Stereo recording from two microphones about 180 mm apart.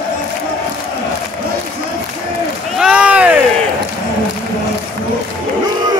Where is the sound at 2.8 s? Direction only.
5° right (ahead or behind).